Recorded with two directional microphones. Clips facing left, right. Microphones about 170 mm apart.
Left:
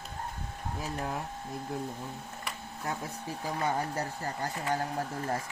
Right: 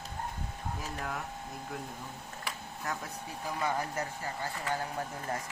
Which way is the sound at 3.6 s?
35° left (ahead or behind).